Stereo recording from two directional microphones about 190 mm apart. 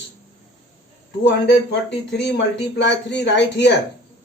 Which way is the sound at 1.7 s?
65° left (ahead or behind).